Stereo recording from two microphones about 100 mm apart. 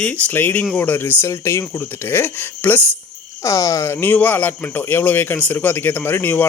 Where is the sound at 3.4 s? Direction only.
35° left (ahead or behind).